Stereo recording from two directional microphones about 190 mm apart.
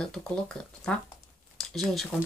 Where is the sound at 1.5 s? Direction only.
Centre (ahead or behind).